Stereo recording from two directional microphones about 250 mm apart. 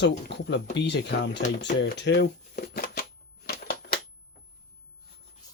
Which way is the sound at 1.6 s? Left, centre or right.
Left.